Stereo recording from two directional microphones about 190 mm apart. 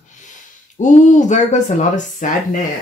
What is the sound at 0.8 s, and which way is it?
Speech, 40° left (ahead or behind).